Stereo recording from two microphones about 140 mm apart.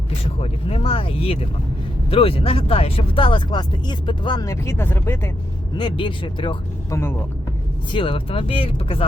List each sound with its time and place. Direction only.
0.3 s speech: 45° left (ahead or behind); by 5.3 s 15° left (ahead or behind)
5.7 s speech: 35° left (ahead or behind)
7.9 s speech: 40° left (ahead or behind)